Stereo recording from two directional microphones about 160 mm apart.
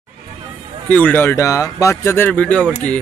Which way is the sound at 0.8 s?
10° left (ahead or behind).